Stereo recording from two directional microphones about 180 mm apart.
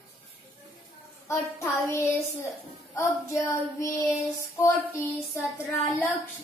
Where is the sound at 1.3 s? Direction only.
15° left (ahead or behind).